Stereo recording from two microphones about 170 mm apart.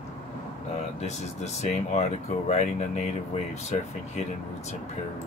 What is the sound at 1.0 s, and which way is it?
Speech, 40° left (ahead or behind).